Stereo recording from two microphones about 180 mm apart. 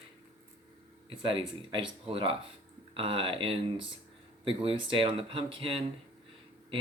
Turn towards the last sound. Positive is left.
turn(degrees=-30)  # may be behind; listen again after turning